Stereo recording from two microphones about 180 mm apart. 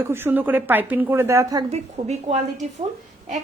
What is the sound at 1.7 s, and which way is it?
Speech, 40° right (ahead or behind).